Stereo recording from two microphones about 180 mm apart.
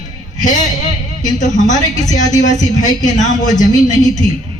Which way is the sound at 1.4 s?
45° left (ahead or behind).